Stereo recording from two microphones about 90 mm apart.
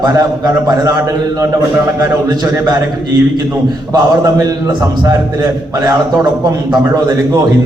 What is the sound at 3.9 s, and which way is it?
A man's voice, 40° right (ahead or behind).